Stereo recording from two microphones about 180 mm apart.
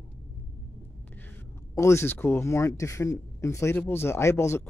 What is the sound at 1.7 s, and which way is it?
Speech, 15° left (ahead or behind).